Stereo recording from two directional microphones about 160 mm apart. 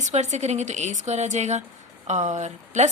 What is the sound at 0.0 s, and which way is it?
A woman's voice, 45° right (ahead or behind).